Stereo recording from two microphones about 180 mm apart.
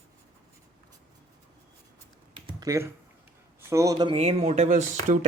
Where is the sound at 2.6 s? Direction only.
15° right (ahead or behind).